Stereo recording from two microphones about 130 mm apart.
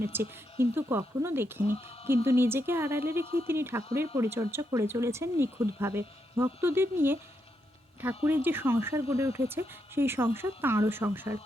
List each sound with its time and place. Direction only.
0.0 s speech: 20° right (ahead or behind)
8.2 s speech: 15° right (ahead or behind)